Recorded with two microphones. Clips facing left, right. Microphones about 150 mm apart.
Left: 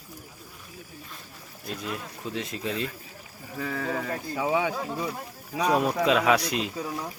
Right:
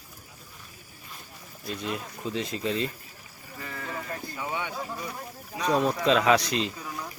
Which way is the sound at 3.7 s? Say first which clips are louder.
Left 5 dB; 90° left.